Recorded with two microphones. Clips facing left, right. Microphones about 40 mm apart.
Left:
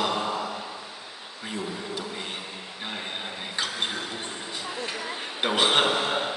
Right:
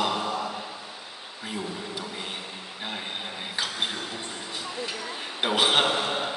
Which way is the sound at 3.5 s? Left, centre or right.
Centre.